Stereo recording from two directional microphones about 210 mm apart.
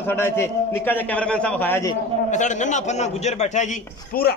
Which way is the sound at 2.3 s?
35° left (ahead or behind).